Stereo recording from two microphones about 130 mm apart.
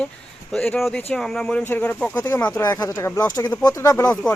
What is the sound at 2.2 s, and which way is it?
Speech, 25° left (ahead or behind).